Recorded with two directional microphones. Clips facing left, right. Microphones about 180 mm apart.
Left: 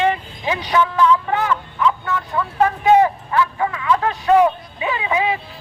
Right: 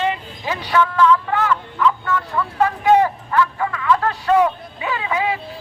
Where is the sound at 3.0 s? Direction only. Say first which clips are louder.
Left 1 dB; 15° left (ahead or behind).